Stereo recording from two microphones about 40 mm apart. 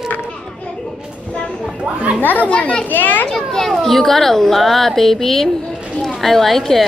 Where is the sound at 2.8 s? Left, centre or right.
Left.